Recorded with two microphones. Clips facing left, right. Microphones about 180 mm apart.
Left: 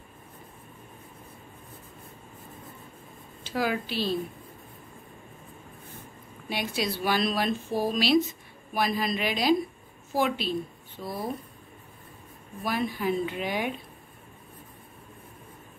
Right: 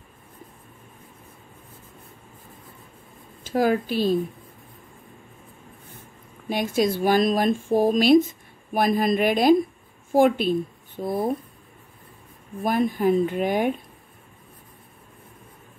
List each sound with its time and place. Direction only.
3.4 s speech: 50° right (ahead or behind)
6.5 s a woman's voice: 45° right (ahead or behind)
12.5 s speech: 50° right (ahead or behind)